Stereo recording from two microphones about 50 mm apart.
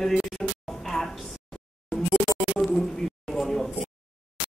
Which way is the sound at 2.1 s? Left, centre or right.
Centre.